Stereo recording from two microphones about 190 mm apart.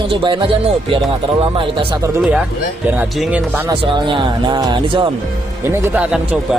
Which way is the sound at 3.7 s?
25° right (ahead or behind).